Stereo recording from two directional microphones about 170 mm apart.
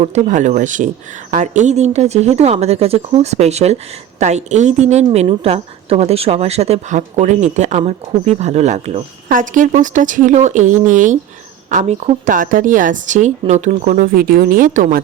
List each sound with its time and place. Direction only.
0.0 s a woman's voice: 45° right (ahead or behind)